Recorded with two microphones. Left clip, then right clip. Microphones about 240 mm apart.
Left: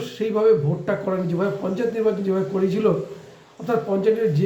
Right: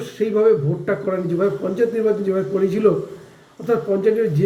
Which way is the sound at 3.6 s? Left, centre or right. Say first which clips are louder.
Right 2 dB; centre.